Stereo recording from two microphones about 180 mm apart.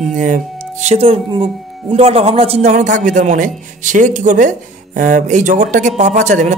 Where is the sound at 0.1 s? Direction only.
45° right (ahead or behind).